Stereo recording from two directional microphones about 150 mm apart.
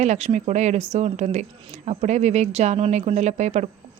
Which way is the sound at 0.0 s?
50° right (ahead or behind).